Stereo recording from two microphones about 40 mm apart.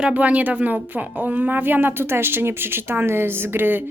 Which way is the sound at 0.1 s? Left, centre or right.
Right.